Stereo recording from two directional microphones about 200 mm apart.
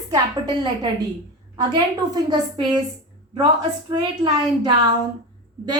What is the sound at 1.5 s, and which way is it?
A woman's voice, 20° right (ahead or behind).